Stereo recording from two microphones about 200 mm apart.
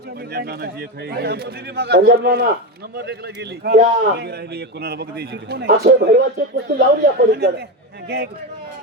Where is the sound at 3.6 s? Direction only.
55° right (ahead or behind).